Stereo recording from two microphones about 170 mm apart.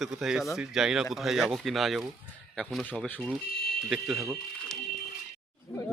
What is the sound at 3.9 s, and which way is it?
Speech, centre (ahead or behind).